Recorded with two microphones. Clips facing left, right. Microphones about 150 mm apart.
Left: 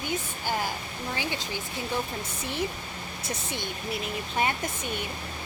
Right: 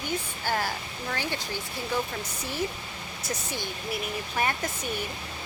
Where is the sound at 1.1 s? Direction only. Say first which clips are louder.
Right 1 dB; 15° left (ahead or behind).